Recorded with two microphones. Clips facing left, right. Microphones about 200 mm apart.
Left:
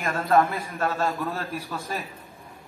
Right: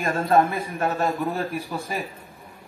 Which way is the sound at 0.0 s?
25° right (ahead or behind).